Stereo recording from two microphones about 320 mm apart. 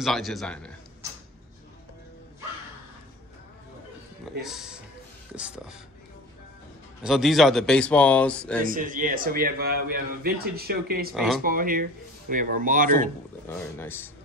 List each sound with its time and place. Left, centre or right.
0.0 s speech: centre
4.4 s speech: centre
7.0 s speech: centre
8.6 s a man's voice: right
11.1 s speech: centre
11.4 s a man's voice: right
13.5 s speech: centre